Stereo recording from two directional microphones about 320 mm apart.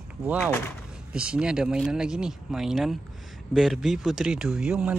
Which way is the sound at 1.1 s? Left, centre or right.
Centre.